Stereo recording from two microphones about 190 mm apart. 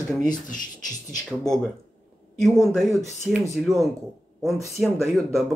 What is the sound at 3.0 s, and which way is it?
Speech, 40° left (ahead or behind).